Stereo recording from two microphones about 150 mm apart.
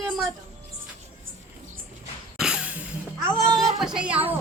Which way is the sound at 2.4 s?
5° right (ahead or behind).